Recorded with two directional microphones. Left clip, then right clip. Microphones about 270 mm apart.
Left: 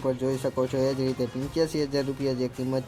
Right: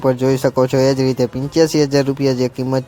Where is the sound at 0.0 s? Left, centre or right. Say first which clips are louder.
Right 12 dB; right.